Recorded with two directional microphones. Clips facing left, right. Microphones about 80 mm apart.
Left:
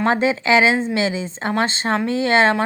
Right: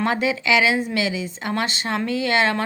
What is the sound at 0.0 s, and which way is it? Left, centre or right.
A woman's voice, left.